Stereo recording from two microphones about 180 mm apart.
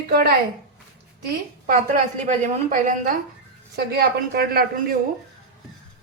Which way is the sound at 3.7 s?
60° right (ahead or behind).